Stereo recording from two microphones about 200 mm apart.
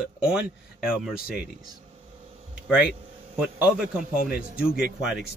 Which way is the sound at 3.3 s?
5° right (ahead or behind).